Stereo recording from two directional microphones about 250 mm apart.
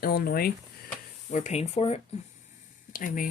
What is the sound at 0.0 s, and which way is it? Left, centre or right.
Speech, left.